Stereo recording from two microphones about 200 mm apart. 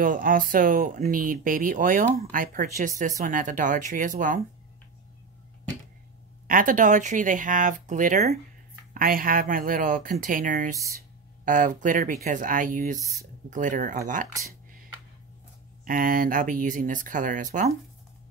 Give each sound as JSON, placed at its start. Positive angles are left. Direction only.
{"t": 0.0, "sound": "speech", "side_deg": -45}
{"t": 6.4, "sound": "speech", "side_deg": -45}
{"t": 15.8, "sound": "speech", "side_deg": -45}